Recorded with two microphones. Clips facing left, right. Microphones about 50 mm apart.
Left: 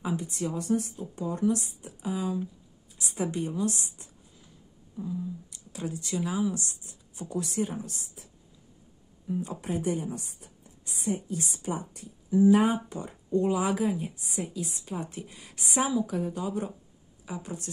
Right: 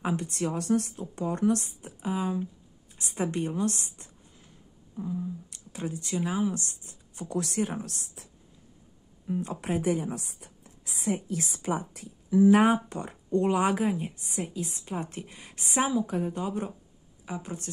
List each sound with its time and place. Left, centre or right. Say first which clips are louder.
0.0 s speech: right 2 dB; right
7.2 s a woman's voice: right 1 dB; right
9.3 s speech: right 1 dB; right
9.6 s a woman's voice: right 4 dB; right
12.5 s speech: right 2 dB; right
15.9 s speech: even; right